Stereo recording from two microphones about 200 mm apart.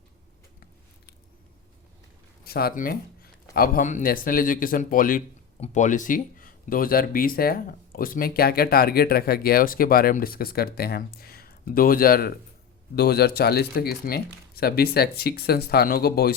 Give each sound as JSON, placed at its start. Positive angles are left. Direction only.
{"t": 2.4, "sound": "speech", "side_deg": 50}